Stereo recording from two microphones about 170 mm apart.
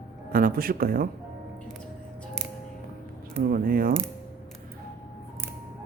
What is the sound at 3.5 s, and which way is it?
Speech, 55° right (ahead or behind).